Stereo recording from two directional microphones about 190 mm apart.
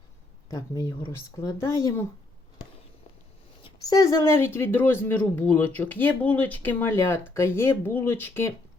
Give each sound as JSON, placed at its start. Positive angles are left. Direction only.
{"t": 0.5, "sound": "speech", "side_deg": 20}
{"t": 3.6, "sound": "speech", "side_deg": 20}